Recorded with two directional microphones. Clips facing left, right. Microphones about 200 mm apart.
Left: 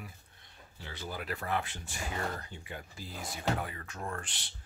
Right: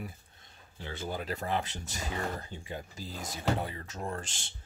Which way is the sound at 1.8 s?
40° right (ahead or behind).